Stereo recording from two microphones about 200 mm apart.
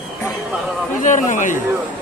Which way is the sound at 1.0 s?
40° left (ahead or behind).